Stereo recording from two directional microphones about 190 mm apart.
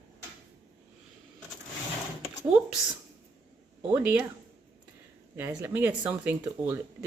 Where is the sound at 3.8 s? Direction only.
5° right (ahead or behind).